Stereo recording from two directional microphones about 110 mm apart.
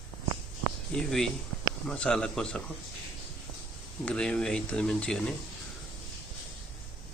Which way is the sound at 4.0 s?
5° left (ahead or behind).